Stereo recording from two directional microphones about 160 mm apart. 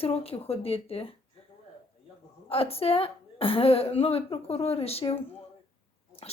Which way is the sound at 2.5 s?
40° left (ahead or behind).